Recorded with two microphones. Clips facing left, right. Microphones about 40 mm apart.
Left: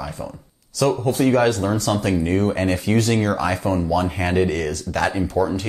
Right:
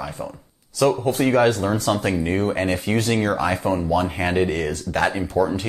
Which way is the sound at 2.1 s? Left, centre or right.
Centre.